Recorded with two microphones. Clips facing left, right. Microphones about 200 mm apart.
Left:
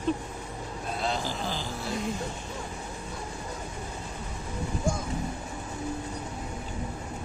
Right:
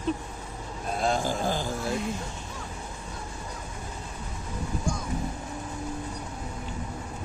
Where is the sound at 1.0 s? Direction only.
50° right (ahead or behind).